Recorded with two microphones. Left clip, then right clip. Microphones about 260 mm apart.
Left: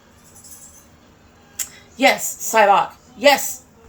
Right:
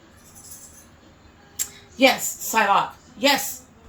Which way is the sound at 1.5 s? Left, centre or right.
Centre.